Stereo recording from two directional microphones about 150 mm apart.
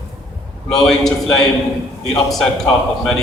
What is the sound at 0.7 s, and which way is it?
A man's voice, centre (ahead or behind).